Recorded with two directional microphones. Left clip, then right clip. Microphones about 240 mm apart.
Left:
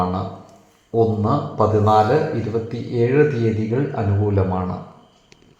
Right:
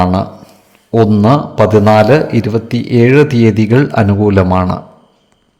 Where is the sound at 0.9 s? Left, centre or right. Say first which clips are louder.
Right 9 dB; right.